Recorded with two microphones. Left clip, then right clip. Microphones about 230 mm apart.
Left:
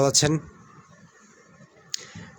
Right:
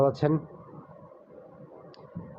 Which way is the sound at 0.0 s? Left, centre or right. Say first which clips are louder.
Left 3 dB; left.